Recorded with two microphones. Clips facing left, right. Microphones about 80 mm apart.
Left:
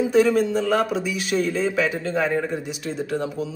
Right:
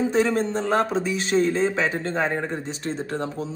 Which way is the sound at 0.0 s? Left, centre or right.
Right.